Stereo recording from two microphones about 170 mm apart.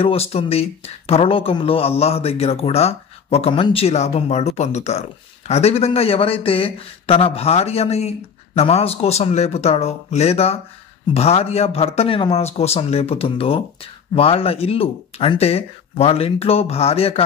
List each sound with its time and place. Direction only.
0.0 s speech: 35° left (ahead or behind)